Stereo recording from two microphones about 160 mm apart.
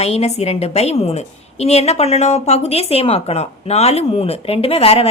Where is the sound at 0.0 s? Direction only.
40° left (ahead or behind).